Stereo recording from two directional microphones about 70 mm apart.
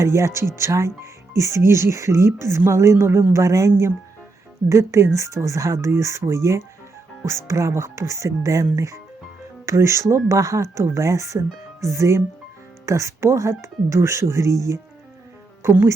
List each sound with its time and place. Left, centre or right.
0.0 s speech: right
15.6 s speech: right